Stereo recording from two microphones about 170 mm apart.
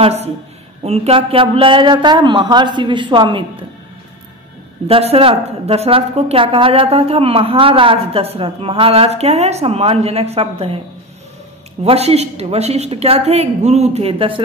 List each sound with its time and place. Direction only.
0.0 s a woman's voice: 40° right (ahead or behind)
4.8 s a woman's voice: 35° right (ahead or behind)
11.8 s a woman's voice: 35° right (ahead or behind)